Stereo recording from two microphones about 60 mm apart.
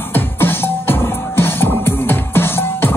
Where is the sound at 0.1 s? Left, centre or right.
Left.